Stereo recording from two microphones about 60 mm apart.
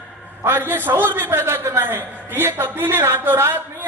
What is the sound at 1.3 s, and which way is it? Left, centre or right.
Speech, right.